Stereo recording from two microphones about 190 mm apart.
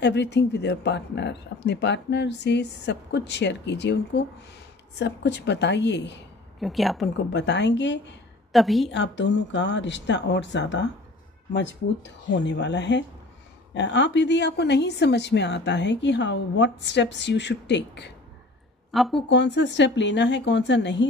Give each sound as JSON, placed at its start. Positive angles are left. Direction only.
{"t": 0.0, "sound": "speech", "side_deg": 65}
{"t": 6.6, "sound": "speech", "side_deg": 0}
{"t": 7.3, "sound": "a woman's voice", "side_deg": 65}
{"t": 8.5, "sound": "speech", "side_deg": 0}
{"t": 8.9, "sound": "a woman's voice", "side_deg": 70}
{"t": 18.9, "sound": "speech", "side_deg": 0}
{"t": 19.2, "sound": "a woman's voice", "side_deg": 65}